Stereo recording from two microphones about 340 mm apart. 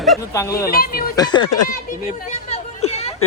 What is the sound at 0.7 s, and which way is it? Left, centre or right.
Speech, left.